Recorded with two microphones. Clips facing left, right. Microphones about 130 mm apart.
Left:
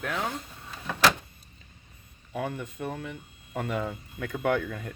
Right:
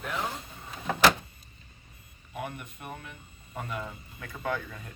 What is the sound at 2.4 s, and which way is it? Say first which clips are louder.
Speech: left 6 dB; 90° left.